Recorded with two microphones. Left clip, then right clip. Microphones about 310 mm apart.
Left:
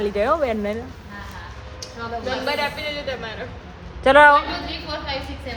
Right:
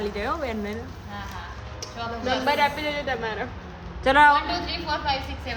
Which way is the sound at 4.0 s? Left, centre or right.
Centre.